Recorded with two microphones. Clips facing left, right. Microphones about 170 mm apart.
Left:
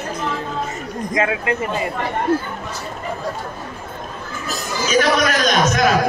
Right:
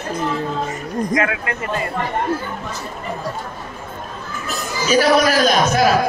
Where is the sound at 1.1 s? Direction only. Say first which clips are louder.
Left 3 dB; 25° left (ahead or behind).